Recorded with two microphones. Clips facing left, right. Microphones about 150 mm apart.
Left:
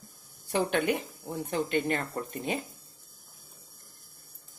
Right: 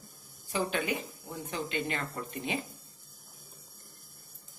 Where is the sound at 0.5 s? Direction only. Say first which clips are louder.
Left 4 dB; 60° left (ahead or behind).